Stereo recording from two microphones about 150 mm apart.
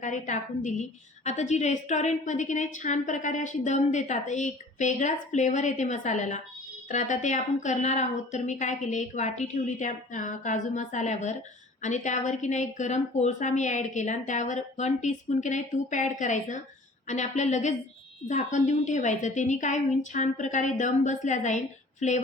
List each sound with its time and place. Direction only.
0.0 s a woman's voice: 55° left (ahead or behind)